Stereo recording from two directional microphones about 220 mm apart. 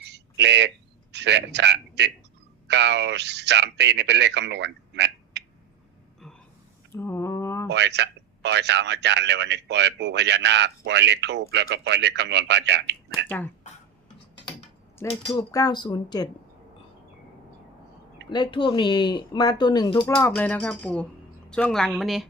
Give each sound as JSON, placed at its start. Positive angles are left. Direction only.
{"t": 0.0, "sound": "a sound", "side_deg": -50}
{"t": 1.1, "sound": "a man's voice", "side_deg": -50}
{"t": 6.9, "sound": "mantra", "side_deg": 10}
{"t": 7.7, "sound": "speech", "side_deg": -50}
{"t": 13.2, "sound": "speech", "side_deg": 5}
{"t": 14.9, "sound": "speech", "side_deg": 15}
{"t": 18.3, "sound": "speech", "side_deg": 20}